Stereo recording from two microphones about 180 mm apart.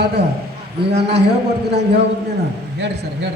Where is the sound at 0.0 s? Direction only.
65° right (ahead or behind).